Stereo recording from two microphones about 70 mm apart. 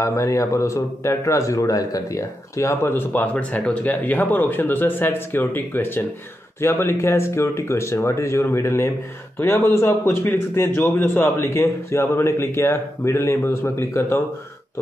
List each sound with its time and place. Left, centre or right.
0.0 s a man's voice: left